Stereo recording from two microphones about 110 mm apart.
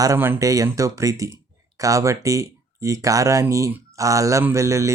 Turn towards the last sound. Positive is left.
turn(degrees=-25)  # may be behind; listen again after turning